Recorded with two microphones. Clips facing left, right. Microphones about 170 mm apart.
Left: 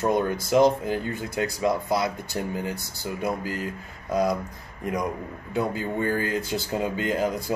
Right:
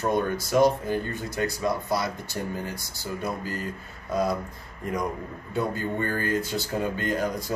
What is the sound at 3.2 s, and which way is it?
Speech, 15° left (ahead or behind).